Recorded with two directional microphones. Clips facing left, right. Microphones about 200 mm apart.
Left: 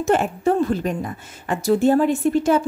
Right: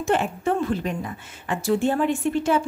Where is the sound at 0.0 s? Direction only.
40° left (ahead or behind).